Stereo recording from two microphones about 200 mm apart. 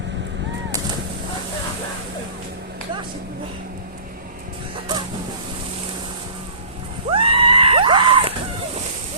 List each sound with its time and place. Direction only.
7.1 s screaming: 25° right (ahead or behind)